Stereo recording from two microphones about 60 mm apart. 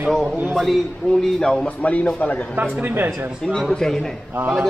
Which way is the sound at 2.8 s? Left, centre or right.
Right.